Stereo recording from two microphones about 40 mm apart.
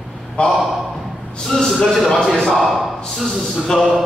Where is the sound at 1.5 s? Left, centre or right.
Centre.